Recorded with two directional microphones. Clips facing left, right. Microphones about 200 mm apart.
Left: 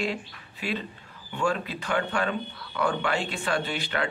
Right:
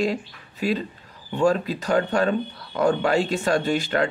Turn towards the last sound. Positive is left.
turn(degrees=-40)  # may be behind; listen again after turning